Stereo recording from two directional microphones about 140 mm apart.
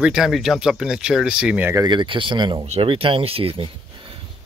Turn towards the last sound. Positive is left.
turn(degrees=-35)  # may be behind; listen again after turning